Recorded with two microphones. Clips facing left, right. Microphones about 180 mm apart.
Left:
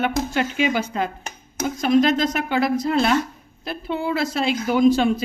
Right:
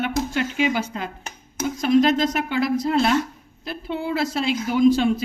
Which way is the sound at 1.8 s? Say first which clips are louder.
Even; 60° left (ahead or behind).